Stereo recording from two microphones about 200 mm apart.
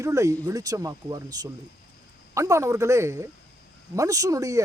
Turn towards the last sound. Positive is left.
turn(degrees=-15)  # may be behind; listen again after turning